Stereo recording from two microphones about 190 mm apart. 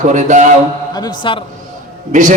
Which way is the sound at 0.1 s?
40° right (ahead or behind).